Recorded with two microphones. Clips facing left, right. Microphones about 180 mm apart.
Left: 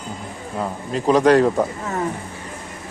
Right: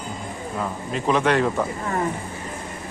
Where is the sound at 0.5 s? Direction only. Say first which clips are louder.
Left 3 dB; 35° left (ahead or behind).